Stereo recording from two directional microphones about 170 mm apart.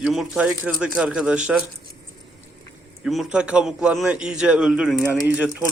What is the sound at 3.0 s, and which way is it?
A man's voice, 5° right (ahead or behind).